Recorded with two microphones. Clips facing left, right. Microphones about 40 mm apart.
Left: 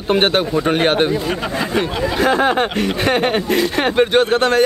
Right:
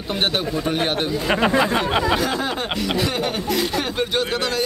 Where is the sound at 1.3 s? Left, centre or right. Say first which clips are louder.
Right 2 dB; right.